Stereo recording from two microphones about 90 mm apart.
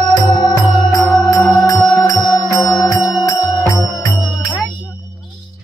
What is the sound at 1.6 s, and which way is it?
Music, 40° left (ahead or behind).